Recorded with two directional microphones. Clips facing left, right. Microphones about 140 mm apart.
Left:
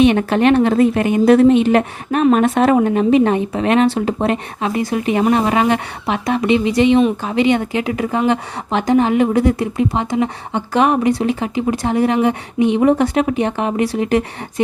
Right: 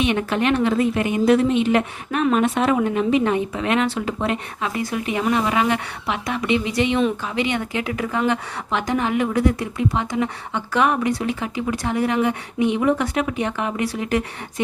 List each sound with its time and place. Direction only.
0.0 s a woman's voice: 35° left (ahead or behind)